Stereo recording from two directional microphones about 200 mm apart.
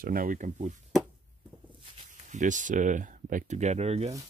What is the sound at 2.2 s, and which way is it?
Speech, 40° right (ahead or behind).